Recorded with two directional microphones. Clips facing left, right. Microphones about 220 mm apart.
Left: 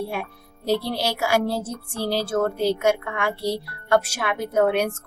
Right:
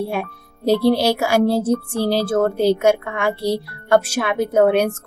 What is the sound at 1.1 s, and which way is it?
Speech, 25° right (ahead or behind).